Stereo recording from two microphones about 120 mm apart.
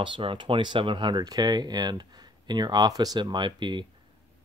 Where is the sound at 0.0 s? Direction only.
45° right (ahead or behind).